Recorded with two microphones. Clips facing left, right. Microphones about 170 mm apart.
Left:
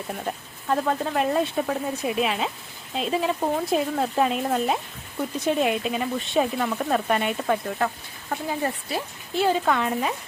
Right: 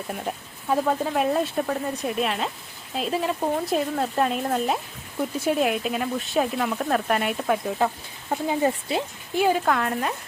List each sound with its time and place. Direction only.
0.1 s speech: centre (ahead or behind)
8.3 s speech: 20° right (ahead or behind)
9.6 s speech: centre (ahead or behind)